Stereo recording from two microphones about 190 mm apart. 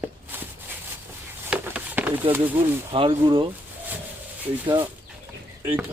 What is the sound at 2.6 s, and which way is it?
Speech, 10° right (ahead or behind).